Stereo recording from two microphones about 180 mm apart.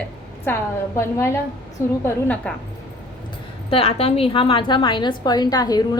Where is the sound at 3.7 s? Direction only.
35° left (ahead or behind).